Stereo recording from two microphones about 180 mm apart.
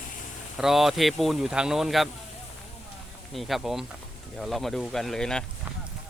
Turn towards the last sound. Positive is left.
turn(degrees=5)  # may be behind; listen again after turning